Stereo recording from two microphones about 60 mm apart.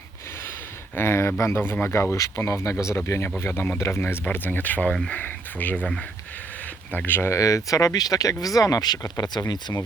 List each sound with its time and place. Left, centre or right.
0.9 s speech: left
2.1 s speech: left
4.0 s speech: left
6.9 s speech: left
7.3 s speech: left